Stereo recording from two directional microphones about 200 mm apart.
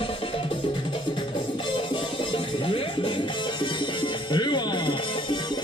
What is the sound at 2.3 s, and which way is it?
Music, 25° left (ahead or behind).